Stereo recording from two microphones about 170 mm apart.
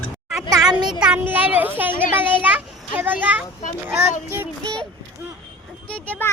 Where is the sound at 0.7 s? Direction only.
25° right (ahead or behind).